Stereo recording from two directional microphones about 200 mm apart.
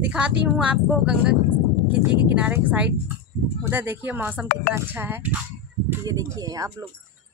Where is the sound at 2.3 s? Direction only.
10° right (ahead or behind).